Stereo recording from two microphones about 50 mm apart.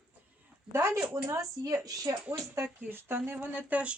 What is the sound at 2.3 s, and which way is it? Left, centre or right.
Speech, right.